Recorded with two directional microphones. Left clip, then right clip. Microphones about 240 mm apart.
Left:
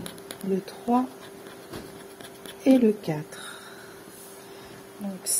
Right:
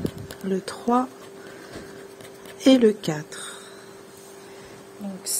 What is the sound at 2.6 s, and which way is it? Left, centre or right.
Speech, centre.